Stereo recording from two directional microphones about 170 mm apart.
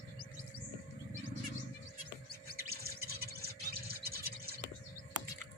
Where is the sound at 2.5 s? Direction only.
65° right (ahead or behind).